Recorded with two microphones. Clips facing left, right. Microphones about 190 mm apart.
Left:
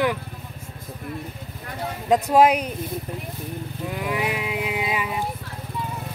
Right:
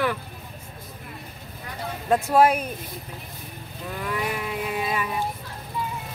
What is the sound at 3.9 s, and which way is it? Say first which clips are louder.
Livestock: left 2 dB; 15° left (ahead or behind).